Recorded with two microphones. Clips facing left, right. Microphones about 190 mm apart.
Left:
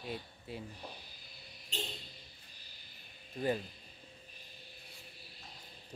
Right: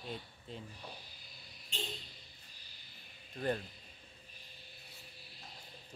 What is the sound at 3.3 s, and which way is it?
Speech, 10° left (ahead or behind).